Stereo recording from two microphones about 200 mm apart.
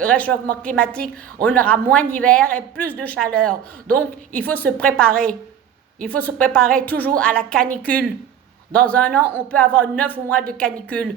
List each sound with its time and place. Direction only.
0.0 s a woman's voice: 5° left (ahead or behind)